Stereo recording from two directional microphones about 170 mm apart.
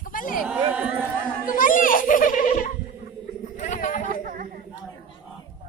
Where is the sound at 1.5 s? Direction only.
55° left (ahead or behind).